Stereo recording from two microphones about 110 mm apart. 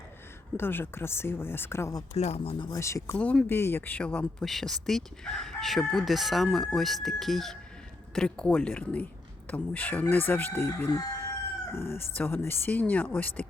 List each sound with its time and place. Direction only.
0.5 s speech: 20° left (ahead or behind)
2.1 s speech: 80° left
2.7 s speech: 25° left (ahead or behind)
3.2 s speech: 10° left (ahead or behind)
11.7 s speech: 20° left (ahead or behind)